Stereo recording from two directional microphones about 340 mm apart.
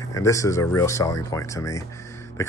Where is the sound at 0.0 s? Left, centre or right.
Centre.